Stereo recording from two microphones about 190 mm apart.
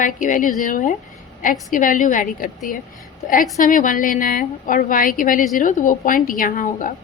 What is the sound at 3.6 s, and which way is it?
A woman's voice, 45° left (ahead or behind).